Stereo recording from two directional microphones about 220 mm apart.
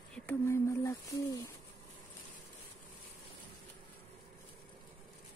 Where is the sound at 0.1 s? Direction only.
10° left (ahead or behind).